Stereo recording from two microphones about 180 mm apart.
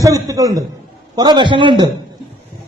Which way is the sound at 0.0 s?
20° right (ahead or behind).